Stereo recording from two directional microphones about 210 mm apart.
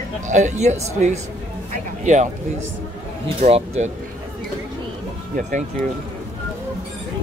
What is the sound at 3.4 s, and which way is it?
Speech, 30° right (ahead or behind).